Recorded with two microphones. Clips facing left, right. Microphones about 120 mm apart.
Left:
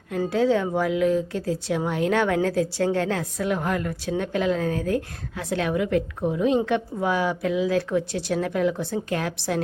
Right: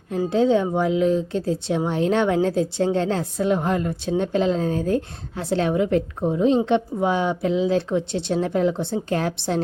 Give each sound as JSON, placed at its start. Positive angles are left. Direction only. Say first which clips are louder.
{"t": 0.3, "sound": "speech", "louder": "right 3 dB", "side_deg": -25}